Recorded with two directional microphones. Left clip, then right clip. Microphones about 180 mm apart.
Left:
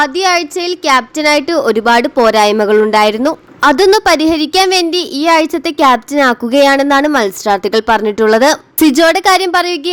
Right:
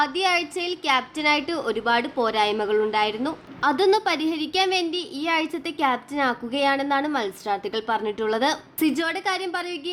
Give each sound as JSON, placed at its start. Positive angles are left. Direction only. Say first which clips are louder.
{"t": 0.0, "sound": "speech", "louder": "left 10 dB", "side_deg": 35}